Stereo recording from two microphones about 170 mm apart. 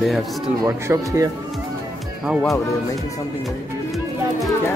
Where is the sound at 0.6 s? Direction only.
20° right (ahead or behind).